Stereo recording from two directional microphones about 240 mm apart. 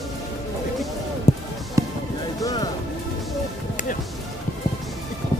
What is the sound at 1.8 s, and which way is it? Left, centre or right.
Music, centre.